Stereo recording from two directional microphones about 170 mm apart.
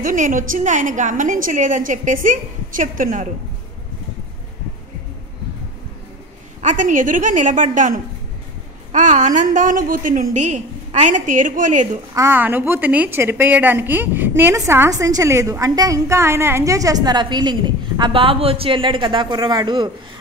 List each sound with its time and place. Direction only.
0.0 s a woman's voice: 50° right (ahead or behind)
6.6 s a woman's voice: 45° right (ahead or behind)
12.1 s a woman's voice: 15° right (ahead or behind)